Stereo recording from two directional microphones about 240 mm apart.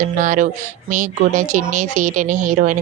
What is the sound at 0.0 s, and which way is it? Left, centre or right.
Speech, right.